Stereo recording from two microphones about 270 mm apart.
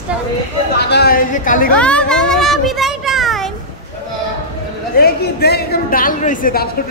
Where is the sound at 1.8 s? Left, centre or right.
Centre.